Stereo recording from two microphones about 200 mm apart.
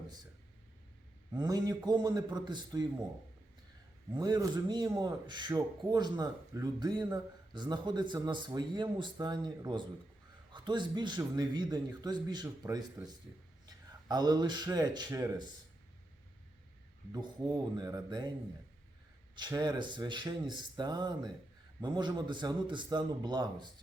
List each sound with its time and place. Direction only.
1.3 s speech: 20° right (ahead or behind)
4.1 s a man's voice: 20° right (ahead or behind)
17.1 s speech: 20° right (ahead or behind)
19.4 s speech: 20° right (ahead or behind)